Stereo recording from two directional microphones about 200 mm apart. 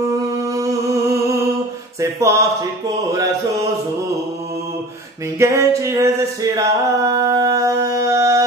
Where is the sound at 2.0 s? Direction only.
15° right (ahead or behind).